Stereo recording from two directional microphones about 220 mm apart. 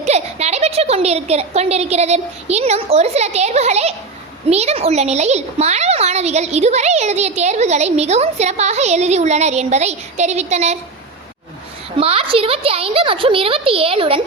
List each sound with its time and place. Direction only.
0.0 s a woman's voice: 30° right (ahead or behind)
11.9 s a woman's voice: 25° right (ahead or behind)